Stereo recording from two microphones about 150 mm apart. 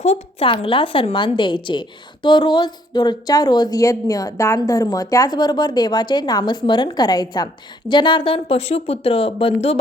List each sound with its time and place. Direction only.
0.0 s a woman's voice: 50° left (ahead or behind)
0.4 s a woman's voice: 35° left (ahead or behind)